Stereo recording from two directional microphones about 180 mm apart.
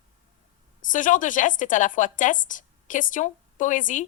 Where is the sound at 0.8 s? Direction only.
45° left (ahead or behind).